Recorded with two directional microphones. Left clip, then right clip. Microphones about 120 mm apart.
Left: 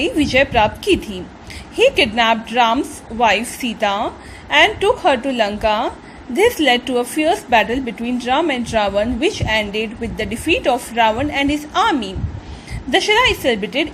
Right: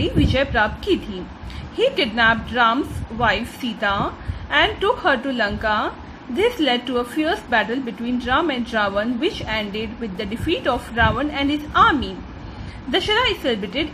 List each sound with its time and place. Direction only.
0.0 s a woman's voice: 25° left (ahead or behind)